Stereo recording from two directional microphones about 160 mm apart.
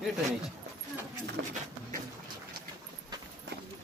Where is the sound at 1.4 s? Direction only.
90° right.